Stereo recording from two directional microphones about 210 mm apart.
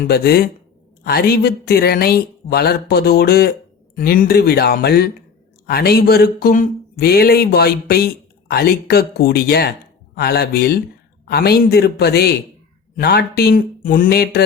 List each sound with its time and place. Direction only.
0.0 s speech: 45° left (ahead or behind)